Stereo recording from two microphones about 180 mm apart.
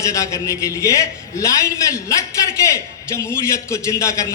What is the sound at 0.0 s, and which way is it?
A man's voice, 15° left (ahead or behind).